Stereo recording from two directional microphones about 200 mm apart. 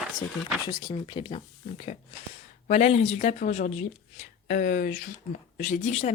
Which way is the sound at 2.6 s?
35° left (ahead or behind).